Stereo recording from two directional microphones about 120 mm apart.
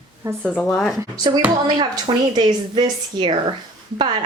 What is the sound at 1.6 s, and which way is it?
A woman's voice, 35° right (ahead or behind).